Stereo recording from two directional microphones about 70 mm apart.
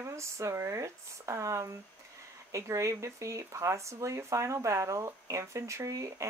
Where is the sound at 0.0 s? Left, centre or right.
Right.